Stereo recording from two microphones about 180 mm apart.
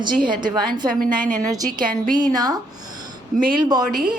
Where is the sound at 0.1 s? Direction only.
50° right (ahead or behind).